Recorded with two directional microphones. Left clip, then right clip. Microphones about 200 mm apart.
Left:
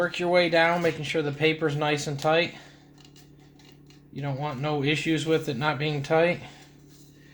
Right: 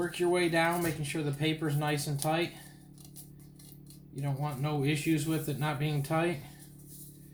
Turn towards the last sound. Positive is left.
turn(degrees=55)  # may be behind; listen again after turning